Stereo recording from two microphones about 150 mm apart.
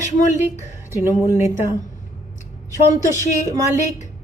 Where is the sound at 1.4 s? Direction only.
20° right (ahead or behind).